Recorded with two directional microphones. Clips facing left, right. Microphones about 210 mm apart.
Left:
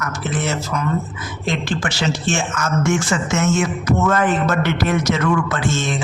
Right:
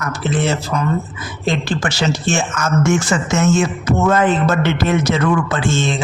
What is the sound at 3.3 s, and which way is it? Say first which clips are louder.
A man's voice: right 4 dB; 30° right (ahead or behind).